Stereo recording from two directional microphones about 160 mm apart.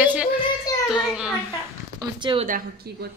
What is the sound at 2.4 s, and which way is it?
Speech, 60° right (ahead or behind).